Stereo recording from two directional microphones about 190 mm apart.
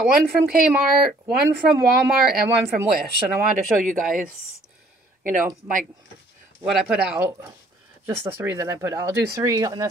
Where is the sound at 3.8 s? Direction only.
45° right (ahead or behind).